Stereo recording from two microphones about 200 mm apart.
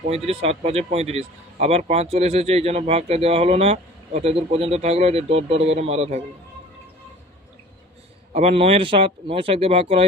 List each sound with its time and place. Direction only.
0.1 s speech: 30° right (ahead or behind)
8.3 s speech: 30° right (ahead or behind)